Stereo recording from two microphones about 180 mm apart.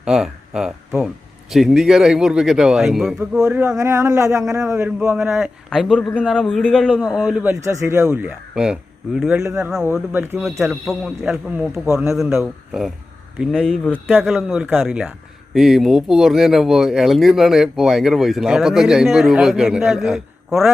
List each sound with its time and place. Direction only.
0.0 s speech: 5° right (ahead or behind)
7.6 s speech: 15° right (ahead or behind)